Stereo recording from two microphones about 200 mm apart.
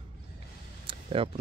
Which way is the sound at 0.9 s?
25° right (ahead or behind).